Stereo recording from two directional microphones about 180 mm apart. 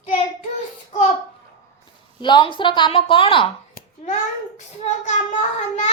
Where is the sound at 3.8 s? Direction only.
55° left (ahead or behind).